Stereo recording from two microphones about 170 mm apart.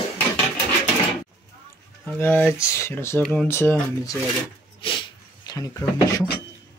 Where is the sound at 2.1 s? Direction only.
10° left (ahead or behind).